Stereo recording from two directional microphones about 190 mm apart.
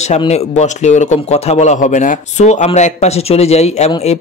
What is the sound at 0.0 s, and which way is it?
Speech, 35° left (ahead or behind).